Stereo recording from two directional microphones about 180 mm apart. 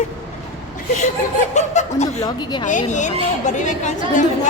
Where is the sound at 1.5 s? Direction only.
40° left (ahead or behind).